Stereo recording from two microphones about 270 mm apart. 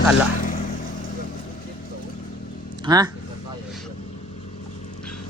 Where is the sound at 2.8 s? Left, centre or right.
Centre.